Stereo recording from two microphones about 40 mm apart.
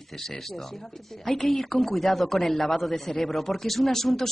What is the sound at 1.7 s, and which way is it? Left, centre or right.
Speech, centre.